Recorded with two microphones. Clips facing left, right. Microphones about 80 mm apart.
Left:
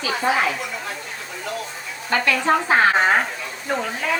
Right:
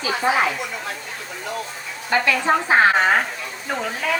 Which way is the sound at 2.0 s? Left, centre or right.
Centre.